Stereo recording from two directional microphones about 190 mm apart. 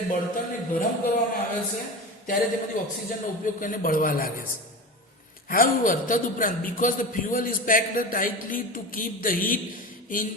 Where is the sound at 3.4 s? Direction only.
45° left (ahead or behind).